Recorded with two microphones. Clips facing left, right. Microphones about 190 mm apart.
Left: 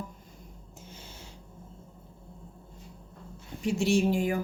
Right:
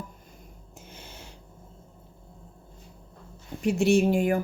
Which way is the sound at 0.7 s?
65° right (ahead or behind).